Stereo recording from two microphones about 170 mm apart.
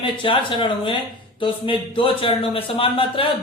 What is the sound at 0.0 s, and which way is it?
A man's voice, 30° left (ahead or behind).